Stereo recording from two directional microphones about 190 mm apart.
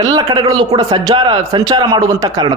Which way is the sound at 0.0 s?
20° right (ahead or behind).